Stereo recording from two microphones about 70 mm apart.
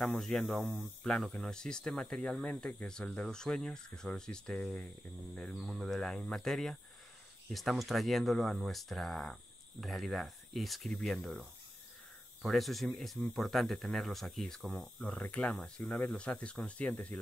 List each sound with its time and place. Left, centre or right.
0.0 s speech: centre
5.6 s speech: centre
12.4 s speech: centre
15.0 s speech: centre